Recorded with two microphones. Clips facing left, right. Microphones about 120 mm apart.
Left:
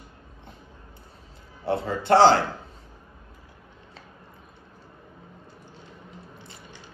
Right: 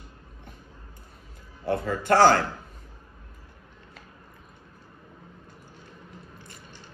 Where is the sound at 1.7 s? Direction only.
25° left (ahead or behind).